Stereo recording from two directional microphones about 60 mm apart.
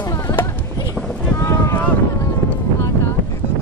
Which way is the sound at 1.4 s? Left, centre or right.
Left.